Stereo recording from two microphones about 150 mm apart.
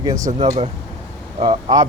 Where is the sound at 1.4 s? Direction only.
35° right (ahead or behind).